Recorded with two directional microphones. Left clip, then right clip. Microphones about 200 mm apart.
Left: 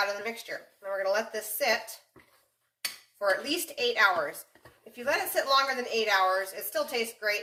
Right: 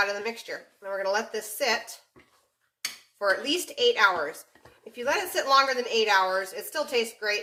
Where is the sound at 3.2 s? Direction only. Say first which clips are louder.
Right 2 dB; 20° right (ahead or behind).